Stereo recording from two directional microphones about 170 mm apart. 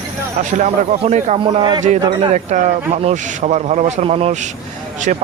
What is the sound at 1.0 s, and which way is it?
Speech, 40° right (ahead or behind).